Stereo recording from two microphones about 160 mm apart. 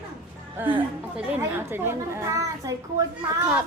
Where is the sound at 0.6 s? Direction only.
15° right (ahead or behind).